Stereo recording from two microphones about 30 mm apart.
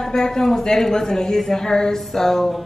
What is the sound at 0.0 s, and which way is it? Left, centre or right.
A woman's voice, left.